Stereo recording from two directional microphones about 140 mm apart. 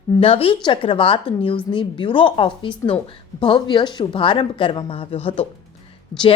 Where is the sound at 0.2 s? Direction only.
40° left (ahead or behind).